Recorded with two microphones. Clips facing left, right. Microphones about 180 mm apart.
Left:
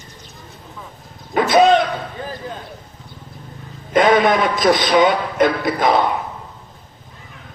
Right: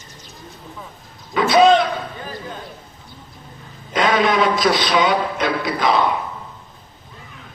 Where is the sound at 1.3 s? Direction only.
50° left (ahead or behind).